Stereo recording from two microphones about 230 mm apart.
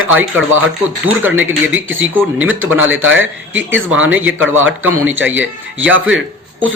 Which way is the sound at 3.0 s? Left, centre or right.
Right.